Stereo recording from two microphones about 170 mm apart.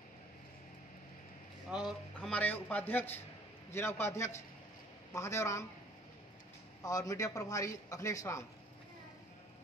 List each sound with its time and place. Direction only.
1.7 s speech: 5° right (ahead or behind)
2.3 s a man's voice: 10° left (ahead or behind)
6.8 s a man's voice: 20° left (ahead or behind)